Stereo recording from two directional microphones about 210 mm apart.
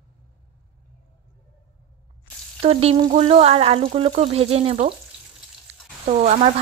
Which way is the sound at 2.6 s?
30° right (ahead or behind).